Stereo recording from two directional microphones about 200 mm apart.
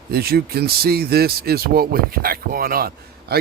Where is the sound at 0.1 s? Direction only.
50° right (ahead or behind).